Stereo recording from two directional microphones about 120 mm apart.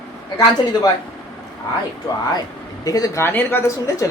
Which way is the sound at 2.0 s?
30° left (ahead or behind).